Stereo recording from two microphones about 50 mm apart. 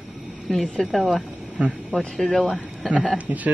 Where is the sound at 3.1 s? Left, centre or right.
Right.